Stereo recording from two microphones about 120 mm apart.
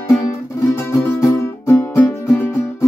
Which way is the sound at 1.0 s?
20° left (ahead or behind).